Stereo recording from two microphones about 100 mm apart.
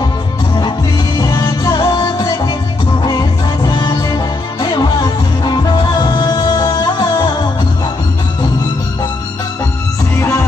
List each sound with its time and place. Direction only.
0.6 s music: 45° left (ahead or behind)